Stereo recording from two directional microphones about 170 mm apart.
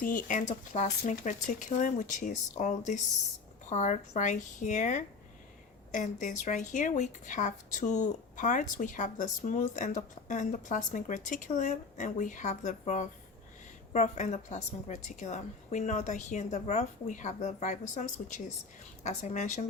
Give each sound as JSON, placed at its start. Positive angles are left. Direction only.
{"t": 0.0, "sound": "speech", "side_deg": 50}